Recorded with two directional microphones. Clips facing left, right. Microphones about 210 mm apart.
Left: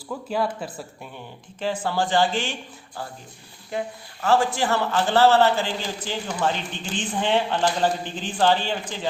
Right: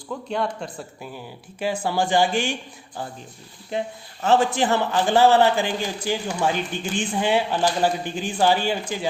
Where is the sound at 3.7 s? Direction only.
25° right (ahead or behind).